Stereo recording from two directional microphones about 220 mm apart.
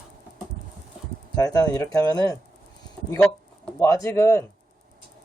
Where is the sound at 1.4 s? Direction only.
15° left (ahead or behind).